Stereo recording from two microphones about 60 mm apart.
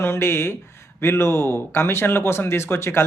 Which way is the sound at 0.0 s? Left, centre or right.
Left.